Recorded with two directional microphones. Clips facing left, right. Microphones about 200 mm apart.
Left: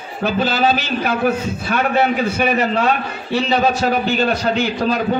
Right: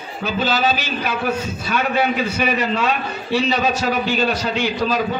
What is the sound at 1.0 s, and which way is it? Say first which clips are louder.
A man's voice: left 4 dB; 50° left (ahead or behind).